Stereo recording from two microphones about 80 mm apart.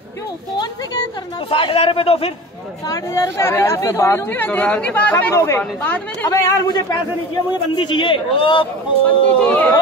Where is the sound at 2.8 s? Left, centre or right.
Left.